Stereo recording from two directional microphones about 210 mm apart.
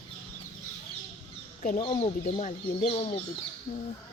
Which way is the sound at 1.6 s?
40° left (ahead or behind).